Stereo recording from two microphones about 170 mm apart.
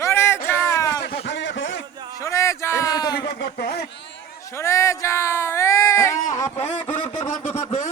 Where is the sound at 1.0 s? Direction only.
85° left.